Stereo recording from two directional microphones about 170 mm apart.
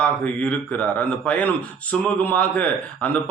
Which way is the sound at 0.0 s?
5° left (ahead or behind).